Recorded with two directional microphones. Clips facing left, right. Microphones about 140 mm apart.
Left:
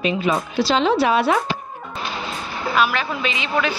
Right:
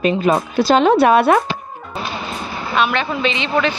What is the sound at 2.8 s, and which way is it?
Speech, 5° left (ahead or behind).